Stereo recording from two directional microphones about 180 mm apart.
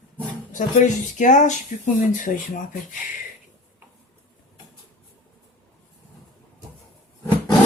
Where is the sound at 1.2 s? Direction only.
45° left (ahead or behind).